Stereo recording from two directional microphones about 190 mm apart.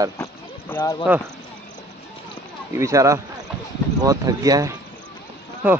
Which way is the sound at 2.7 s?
15° right (ahead or behind).